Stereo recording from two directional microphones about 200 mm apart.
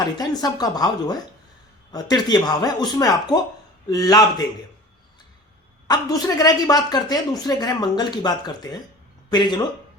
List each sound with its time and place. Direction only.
0.0 s speech: 20° left (ahead or behind)
5.9 s speech: 15° left (ahead or behind)